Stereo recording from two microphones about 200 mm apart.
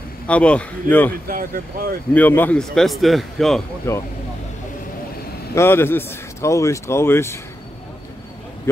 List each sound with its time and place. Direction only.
0.3 s speech: 5° left (ahead or behind)
1.2 s speech: 45° right (ahead or behind)
2.1 s a man's voice: 10° left (ahead or behind)
3.9 s speech: 15° left (ahead or behind)
5.5 s speech: 10° left (ahead or behind)